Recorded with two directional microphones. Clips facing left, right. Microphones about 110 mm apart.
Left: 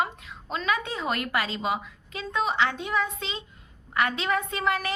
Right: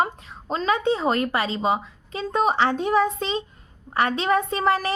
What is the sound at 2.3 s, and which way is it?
A woman's voice, 40° right (ahead or behind).